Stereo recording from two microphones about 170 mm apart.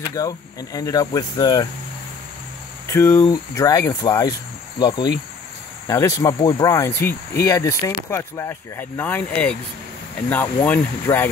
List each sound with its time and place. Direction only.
0.1 s speech: 20° left (ahead or behind)
2.9 s speech: 15° left (ahead or behind)